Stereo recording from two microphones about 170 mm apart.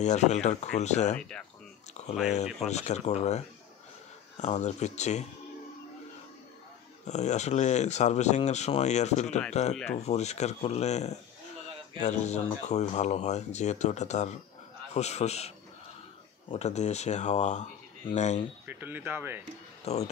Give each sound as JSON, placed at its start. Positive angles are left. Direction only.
{"t": 0.0, "sound": "speech", "side_deg": 45}
{"t": 2.2, "sound": "speech", "side_deg": 40}
{"t": 7.1, "sound": "speech", "side_deg": 45}
{"t": 18.7, "sound": "speech", "side_deg": -10}
{"t": 19.8, "sound": "speech", "side_deg": 40}